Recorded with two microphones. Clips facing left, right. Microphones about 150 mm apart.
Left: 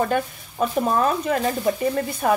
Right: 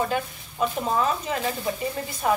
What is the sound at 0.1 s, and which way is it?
Speech, 50° left (ahead or behind).